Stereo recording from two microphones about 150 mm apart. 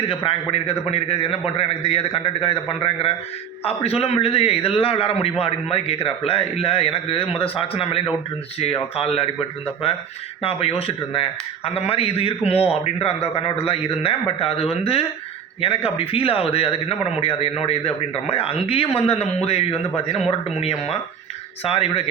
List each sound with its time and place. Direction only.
0.1 s a man's voice: 35° left (ahead or behind)
10.4 s a man's voice: 40° left (ahead or behind)